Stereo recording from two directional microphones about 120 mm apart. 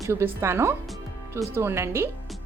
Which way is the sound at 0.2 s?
20° right (ahead or behind).